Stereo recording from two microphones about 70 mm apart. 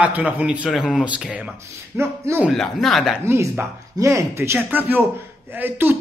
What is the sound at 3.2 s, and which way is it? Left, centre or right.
Speech, right.